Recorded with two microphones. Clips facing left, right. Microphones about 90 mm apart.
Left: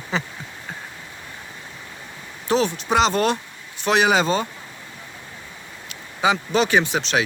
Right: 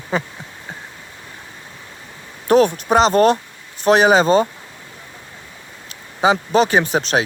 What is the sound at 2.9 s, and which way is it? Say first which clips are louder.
Speech: right 5 dB; 40° right (ahead or behind).